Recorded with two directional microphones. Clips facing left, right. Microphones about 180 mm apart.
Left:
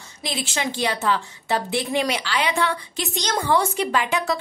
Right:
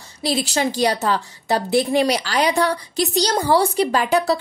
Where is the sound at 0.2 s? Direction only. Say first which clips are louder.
Right 7 dB; 35° right (ahead or behind).